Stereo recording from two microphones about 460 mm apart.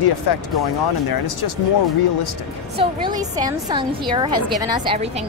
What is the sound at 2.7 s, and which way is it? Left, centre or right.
A woman's voice, centre.